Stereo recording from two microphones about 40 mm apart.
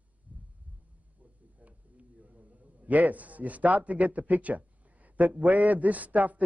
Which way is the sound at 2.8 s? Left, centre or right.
Right.